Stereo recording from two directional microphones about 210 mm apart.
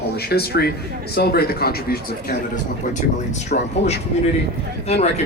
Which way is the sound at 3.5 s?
45° left (ahead or behind).